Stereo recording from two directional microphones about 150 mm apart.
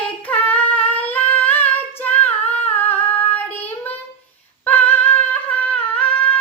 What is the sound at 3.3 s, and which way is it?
Child singing, 15° left (ahead or behind).